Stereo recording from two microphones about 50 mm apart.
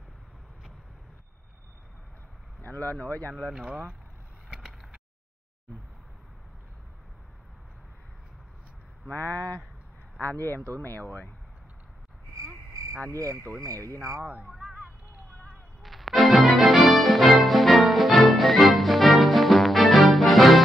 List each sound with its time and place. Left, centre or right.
2.6 s speech: left
3.4 s speech: centre
4.5 s vehicle: centre
9.1 s speech: left
12.4 s frog: right
13.7 s speech: right
14.5 s a sound: centre
15.8 s music: centre